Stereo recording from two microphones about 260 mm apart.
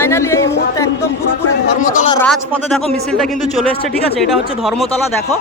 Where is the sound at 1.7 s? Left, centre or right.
Left.